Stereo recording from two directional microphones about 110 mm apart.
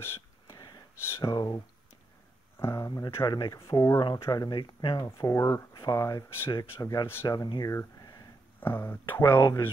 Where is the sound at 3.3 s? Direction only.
40° left (ahead or behind).